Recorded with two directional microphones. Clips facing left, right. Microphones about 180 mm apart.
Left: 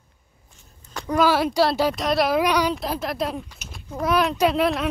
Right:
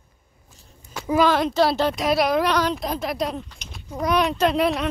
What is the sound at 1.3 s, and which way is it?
A child's voice, 5° left (ahead or behind).